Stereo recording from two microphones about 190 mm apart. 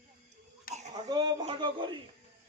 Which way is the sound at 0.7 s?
50° left (ahead or behind).